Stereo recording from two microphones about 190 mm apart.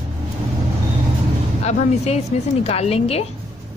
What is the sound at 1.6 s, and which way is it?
A woman's voice, 35° left (ahead or behind).